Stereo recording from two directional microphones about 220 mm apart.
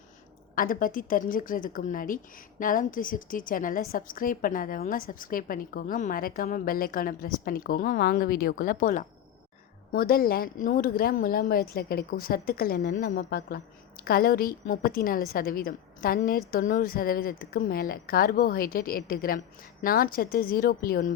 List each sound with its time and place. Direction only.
0.5 s a woman's voice: 40° left (ahead or behind)